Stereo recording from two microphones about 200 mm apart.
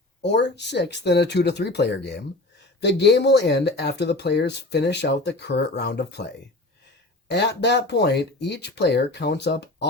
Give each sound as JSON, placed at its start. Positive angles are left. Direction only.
{"t": 0.2, "sound": "speech", "side_deg": 60}
{"t": 7.3, "sound": "speech", "side_deg": 60}